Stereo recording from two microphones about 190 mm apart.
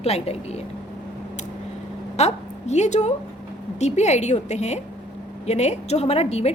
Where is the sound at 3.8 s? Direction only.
35° left (ahead or behind).